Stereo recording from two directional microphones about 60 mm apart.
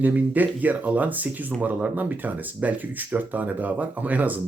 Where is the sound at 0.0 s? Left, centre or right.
Right.